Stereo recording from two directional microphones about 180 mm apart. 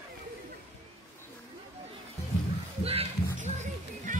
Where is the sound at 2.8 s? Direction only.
35° right (ahead or behind).